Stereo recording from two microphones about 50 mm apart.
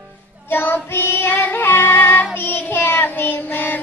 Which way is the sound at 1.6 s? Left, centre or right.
Left.